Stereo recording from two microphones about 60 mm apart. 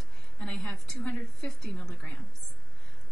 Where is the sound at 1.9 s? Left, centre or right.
Left.